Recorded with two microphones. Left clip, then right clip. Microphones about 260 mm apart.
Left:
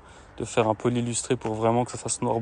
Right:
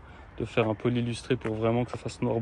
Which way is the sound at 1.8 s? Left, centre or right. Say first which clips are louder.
Left 4 dB; left.